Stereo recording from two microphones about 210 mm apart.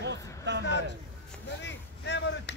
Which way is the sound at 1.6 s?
55° left (ahead or behind).